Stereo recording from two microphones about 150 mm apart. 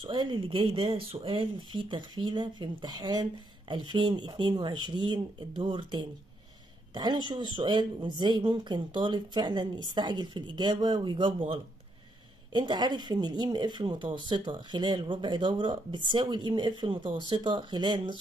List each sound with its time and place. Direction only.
0.0 s speech: 30° right (ahead or behind)